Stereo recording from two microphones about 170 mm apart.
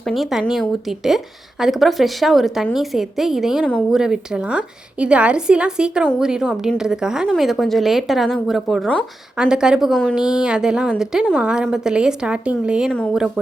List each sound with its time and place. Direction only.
0.0 s a woman's voice: centre (ahead or behind)